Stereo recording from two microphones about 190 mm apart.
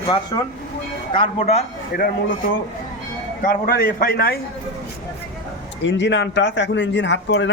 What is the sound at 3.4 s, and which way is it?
Speech, 45° left (ahead or behind).